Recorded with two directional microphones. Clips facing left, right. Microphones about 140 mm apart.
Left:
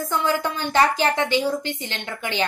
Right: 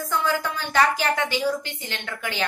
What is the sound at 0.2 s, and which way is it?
A woman's voice, 25° left (ahead or behind).